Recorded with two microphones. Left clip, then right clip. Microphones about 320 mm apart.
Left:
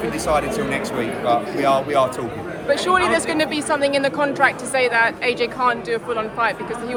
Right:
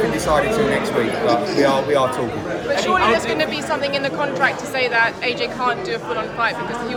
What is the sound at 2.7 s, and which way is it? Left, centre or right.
Speech, left.